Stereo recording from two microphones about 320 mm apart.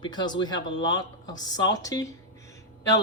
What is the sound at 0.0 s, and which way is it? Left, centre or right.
Speech, centre.